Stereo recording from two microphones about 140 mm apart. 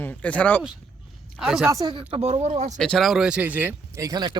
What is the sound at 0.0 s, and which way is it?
Speech, 10° left (ahead or behind).